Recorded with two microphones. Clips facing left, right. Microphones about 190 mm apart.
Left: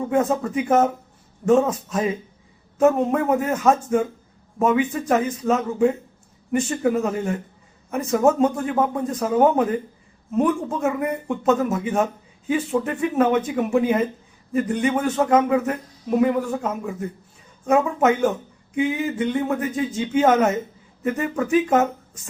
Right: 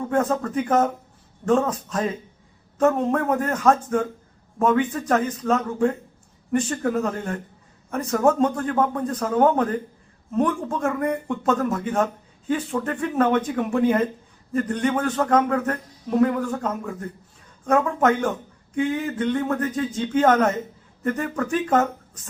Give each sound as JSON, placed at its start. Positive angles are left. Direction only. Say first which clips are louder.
{"t": 0.1, "sound": "speech", "louder": "left 1 dB", "side_deg": 10}